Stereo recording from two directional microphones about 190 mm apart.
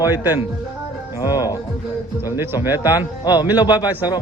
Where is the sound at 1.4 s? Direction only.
20° left (ahead or behind).